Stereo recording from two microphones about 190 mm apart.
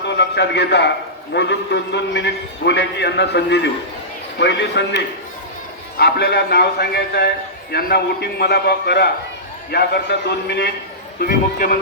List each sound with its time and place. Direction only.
0.2 s a man's voice: 65° left (ahead or behind)